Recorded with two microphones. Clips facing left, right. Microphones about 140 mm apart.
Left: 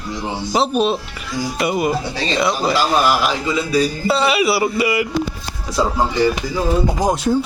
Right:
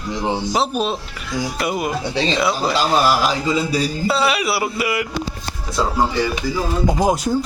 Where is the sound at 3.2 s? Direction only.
30° right (ahead or behind).